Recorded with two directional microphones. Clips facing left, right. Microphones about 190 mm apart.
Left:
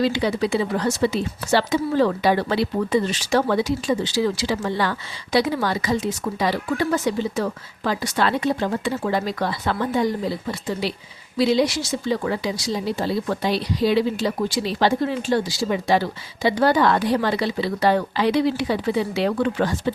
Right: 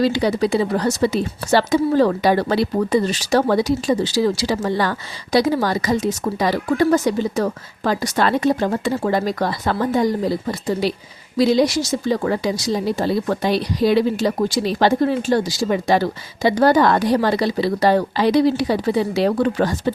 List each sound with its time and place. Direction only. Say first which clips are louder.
0.0 s a woman's voice: right 3 dB; 40° right (ahead or behind)